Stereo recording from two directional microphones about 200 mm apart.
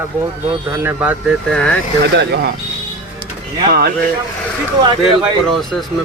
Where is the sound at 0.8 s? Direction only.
10° right (ahead or behind).